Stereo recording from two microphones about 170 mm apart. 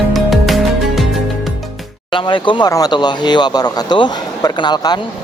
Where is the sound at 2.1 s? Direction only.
30° left (ahead or behind).